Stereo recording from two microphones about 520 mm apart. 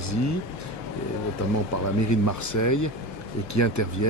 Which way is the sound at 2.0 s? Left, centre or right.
Left.